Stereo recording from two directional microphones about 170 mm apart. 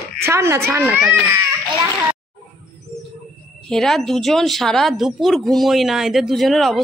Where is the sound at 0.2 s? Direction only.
15° right (ahead or behind).